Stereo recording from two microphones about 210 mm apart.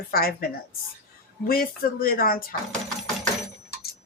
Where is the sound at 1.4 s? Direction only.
45° left (ahead or behind).